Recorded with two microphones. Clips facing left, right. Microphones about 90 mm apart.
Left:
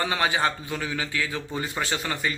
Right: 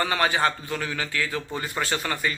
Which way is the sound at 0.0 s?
20° left (ahead or behind).